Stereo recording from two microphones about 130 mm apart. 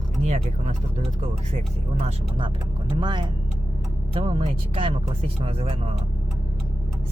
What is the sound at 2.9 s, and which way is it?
Speech, 35° right (ahead or behind).